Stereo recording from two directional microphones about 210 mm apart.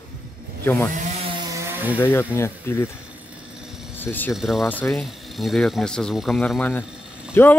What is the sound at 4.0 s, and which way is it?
Speech, 10° left (ahead or behind).